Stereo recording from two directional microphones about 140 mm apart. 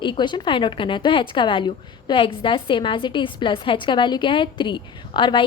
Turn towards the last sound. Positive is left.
turn(degrees=35)  # may be behind; listen again after turning